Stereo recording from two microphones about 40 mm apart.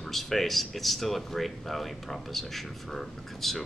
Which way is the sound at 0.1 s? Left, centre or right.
Centre.